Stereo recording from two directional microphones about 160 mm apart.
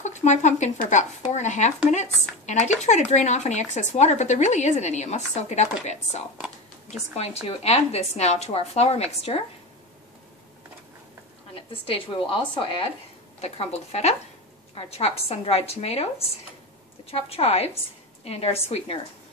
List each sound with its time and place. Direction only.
0.0 s a woman's voice: 45° left (ahead or behind)
11.7 s a woman's voice: 35° left (ahead or behind)